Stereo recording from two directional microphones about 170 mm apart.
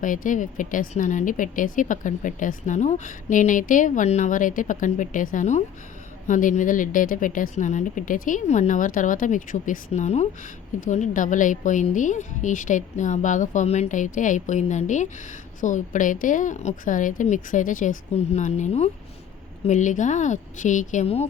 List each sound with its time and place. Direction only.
0.0 s speech: 50° left (ahead or behind)